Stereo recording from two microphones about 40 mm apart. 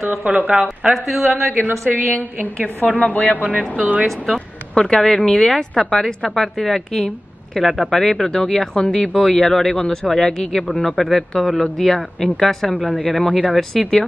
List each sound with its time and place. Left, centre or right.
0.2 s speech: right
0.6 s a woman's voice: centre
1.9 s a woman's voice: left
3.7 s speech: right
4.3 s a man's voice: centre
9.6 s a man's voice: left
10.0 s a man's voice: centre
12.9 s a man's voice: left